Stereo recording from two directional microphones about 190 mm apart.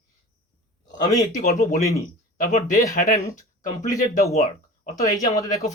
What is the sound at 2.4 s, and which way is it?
Speech, 40° left (ahead or behind).